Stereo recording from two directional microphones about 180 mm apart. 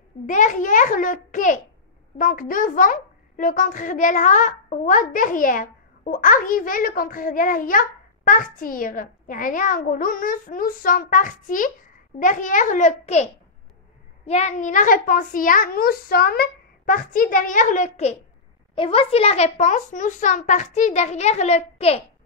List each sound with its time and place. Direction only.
0.3 s a child's voice: 45° left (ahead or behind)